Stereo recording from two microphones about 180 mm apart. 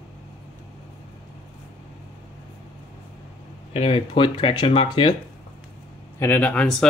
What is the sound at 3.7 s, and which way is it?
Speech, 30° left (ahead or behind).